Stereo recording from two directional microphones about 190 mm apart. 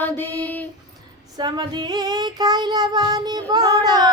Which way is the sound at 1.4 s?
20° right (ahead or behind).